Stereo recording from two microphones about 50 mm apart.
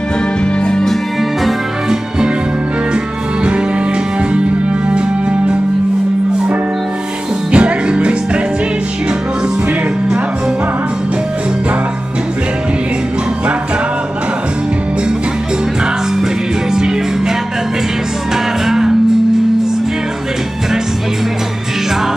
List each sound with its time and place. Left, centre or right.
0.7 s music: centre
7.5 s music: right
16.7 s music: centre
18.6 s music: centre